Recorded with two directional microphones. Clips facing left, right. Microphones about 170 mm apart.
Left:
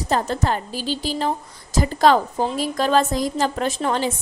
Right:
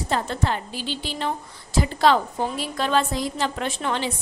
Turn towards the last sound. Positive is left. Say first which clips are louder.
# left 4 dB
turn(degrees=40)  # may be behind; listen again after turning